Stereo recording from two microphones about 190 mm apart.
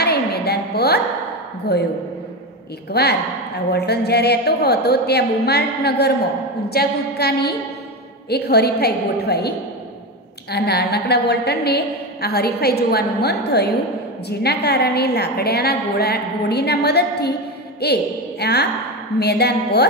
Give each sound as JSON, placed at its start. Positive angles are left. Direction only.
{"t": 0.0, "sound": "a sound", "side_deg": 55}
{"t": 1.7, "sound": "a woman's voice", "side_deg": 60}
{"t": 2.9, "sound": "a woman's voice", "side_deg": 60}
{"t": 10.5, "sound": "a woman's voice", "side_deg": 60}